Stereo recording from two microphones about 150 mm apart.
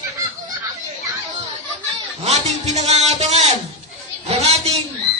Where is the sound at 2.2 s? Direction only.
45° right (ahead or behind).